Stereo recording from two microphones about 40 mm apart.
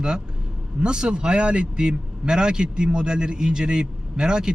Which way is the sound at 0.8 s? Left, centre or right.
Right.